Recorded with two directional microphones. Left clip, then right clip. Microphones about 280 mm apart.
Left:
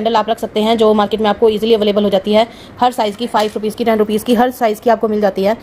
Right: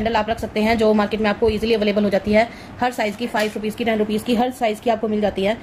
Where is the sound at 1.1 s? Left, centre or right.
Left.